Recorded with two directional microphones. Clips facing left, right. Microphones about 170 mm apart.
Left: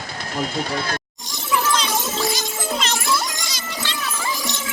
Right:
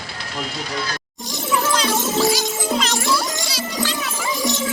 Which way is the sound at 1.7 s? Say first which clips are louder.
Right 4 dB; 5° right (ahead or behind).